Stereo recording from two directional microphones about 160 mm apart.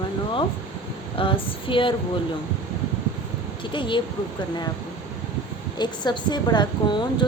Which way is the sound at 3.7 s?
30° left (ahead or behind).